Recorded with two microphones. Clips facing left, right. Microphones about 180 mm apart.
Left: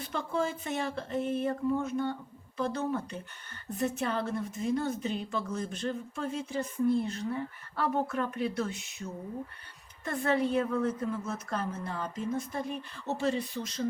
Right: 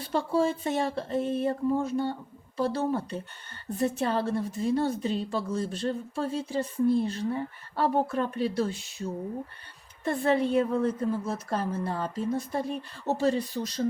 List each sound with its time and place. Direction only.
0.0 s a woman's voice: 30° right (ahead or behind)